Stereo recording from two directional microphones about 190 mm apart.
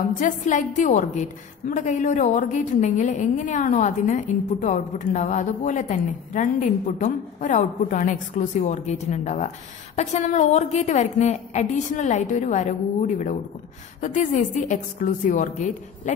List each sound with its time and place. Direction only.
0.0 s a woman's voice: 40° left (ahead or behind)